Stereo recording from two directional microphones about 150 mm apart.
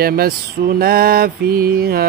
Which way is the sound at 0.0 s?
85° right.